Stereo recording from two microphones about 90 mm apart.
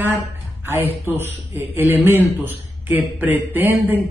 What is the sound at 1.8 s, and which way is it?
A man's voice, 25° right (ahead or behind).